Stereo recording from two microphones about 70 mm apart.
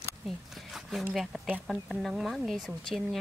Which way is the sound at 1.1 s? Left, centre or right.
Centre.